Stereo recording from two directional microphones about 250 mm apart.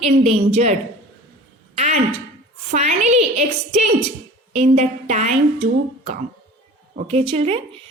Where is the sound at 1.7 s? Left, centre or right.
Right.